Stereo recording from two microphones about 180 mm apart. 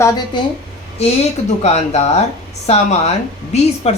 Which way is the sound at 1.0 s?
35° left (ahead or behind).